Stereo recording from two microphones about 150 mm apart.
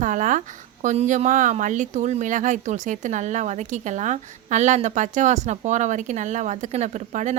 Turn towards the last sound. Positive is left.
turn(degrees=-55)  # may be behind; listen again after turning